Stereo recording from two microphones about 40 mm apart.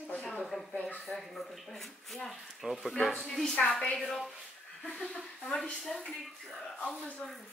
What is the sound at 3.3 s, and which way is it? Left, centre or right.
Speech, centre.